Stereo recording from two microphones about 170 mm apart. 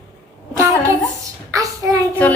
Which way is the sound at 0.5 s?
15° right (ahead or behind).